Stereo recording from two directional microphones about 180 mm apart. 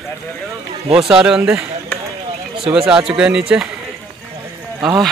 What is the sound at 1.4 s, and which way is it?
Speech, 15° right (ahead or behind).